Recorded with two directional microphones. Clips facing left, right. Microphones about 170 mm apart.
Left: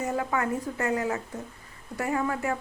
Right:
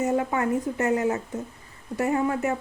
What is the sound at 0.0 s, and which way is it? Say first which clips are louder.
Speech: right 4 dB; 25° right (ahead or behind).